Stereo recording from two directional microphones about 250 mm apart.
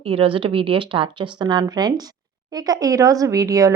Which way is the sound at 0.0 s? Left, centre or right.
Right.